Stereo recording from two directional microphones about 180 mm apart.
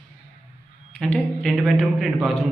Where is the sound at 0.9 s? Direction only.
5° left (ahead or behind).